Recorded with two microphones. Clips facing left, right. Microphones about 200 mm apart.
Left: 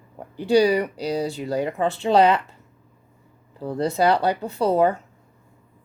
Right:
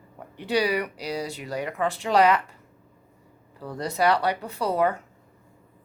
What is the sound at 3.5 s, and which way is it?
Speech, 25° left (ahead or behind).